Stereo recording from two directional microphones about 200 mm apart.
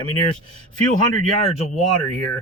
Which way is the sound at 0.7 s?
40° right (ahead or behind).